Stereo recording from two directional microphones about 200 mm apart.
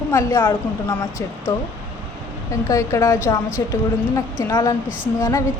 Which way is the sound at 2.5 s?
15° left (ahead or behind).